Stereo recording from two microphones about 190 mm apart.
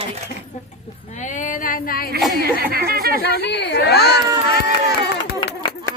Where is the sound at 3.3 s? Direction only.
60° left (ahead or behind).